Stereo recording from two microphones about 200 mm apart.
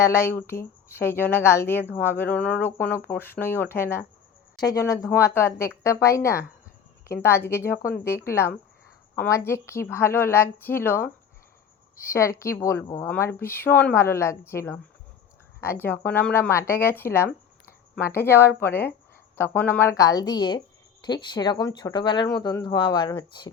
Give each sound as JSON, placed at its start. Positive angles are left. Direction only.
{"t": 0.0, "sound": "a woman's voice", "side_deg": 15}